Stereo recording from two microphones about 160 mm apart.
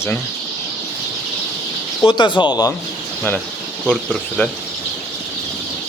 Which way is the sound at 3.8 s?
5° left (ahead or behind).